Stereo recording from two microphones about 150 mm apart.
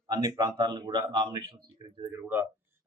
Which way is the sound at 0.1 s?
25° right (ahead or behind).